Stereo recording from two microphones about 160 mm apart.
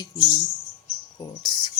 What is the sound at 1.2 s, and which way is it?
Speech, 25° left (ahead or behind).